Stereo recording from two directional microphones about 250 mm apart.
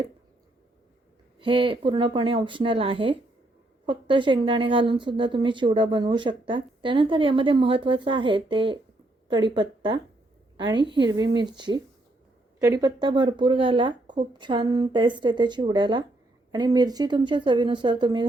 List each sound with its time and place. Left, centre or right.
1.4 s a woman's voice: right